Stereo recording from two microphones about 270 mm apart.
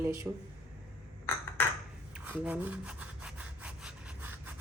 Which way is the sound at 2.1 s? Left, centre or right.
Centre.